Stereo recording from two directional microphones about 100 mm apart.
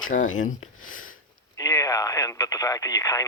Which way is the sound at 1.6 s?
35° left (ahead or behind).